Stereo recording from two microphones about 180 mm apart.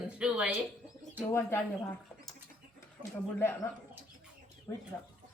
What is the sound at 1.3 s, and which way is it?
Speech, 15° left (ahead or behind).